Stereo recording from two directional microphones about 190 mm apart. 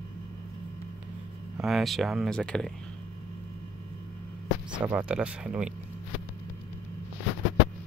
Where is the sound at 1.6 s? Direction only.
Centre (ahead or behind).